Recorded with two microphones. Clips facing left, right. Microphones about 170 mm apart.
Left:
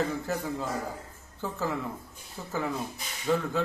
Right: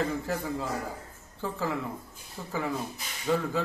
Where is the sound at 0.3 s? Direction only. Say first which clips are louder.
Even; centre (ahead or behind).